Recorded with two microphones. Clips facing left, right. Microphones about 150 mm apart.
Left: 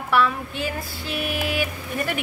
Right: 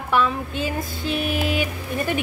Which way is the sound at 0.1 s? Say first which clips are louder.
Even; 20° right (ahead or behind).